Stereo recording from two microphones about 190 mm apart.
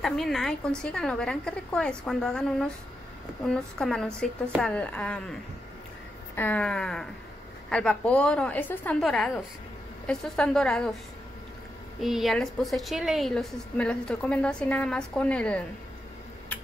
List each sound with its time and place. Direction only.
0.0 s a woman's voice: centre (ahead or behind)
6.3 s a woman's voice: 10° left (ahead or behind)
12.0 s a woman's voice: centre (ahead or behind)